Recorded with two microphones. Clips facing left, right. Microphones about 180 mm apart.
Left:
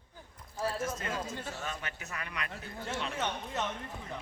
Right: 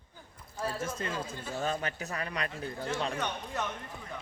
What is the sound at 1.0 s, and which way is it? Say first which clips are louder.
A man's voice: right 1 dB; 30° right (ahead or behind).